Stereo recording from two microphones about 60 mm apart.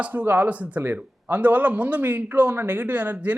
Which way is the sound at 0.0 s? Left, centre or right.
Right.